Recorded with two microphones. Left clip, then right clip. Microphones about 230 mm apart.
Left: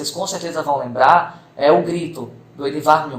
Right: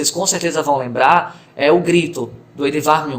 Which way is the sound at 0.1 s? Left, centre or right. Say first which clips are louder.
Right 5 dB; right.